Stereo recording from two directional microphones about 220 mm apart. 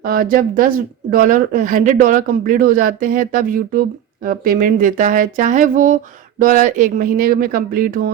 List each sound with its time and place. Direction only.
0.0 s speech: 40° right (ahead or behind)